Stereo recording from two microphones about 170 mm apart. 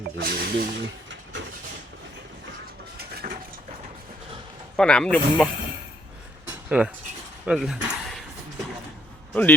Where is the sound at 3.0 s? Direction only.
65° right (ahead or behind).